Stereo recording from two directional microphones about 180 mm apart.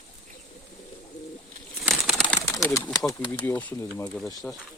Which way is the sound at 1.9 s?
Centre (ahead or behind).